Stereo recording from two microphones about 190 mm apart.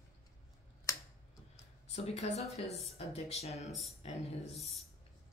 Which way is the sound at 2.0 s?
35° left (ahead or behind).